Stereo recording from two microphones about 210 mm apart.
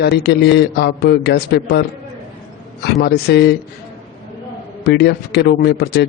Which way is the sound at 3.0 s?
50° left (ahead or behind).